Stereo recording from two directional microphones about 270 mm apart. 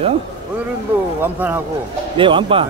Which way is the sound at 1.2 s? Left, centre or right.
Centre.